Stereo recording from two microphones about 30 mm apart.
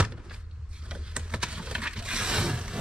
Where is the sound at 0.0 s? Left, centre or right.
Right.